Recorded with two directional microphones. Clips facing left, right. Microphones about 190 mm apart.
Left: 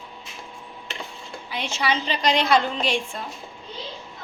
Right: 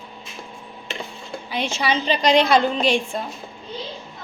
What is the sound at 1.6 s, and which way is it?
A woman's voice, 15° right (ahead or behind).